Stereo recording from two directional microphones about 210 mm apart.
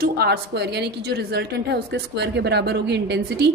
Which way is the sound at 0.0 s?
50° right (ahead or behind).